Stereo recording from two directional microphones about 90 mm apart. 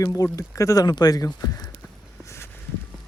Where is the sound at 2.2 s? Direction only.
30° left (ahead or behind).